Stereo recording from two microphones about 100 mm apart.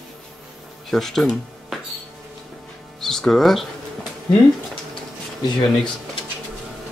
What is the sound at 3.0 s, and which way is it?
Speech, 5° left (ahead or behind).